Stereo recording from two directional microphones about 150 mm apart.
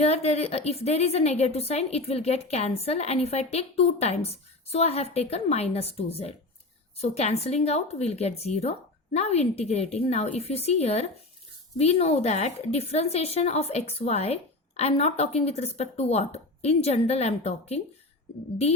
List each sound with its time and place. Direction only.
0.0 s a woman's voice: 45° left (ahead or behind)